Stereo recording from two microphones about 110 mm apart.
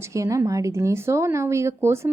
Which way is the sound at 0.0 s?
30° right (ahead or behind).